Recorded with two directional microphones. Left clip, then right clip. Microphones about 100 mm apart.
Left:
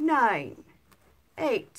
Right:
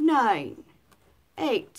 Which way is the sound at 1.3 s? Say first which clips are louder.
Right 1 dB; 10° right (ahead or behind).